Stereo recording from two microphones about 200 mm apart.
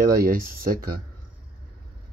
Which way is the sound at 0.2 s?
45° right (ahead or behind).